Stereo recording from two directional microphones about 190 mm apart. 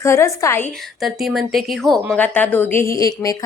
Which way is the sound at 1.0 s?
Centre (ahead or behind).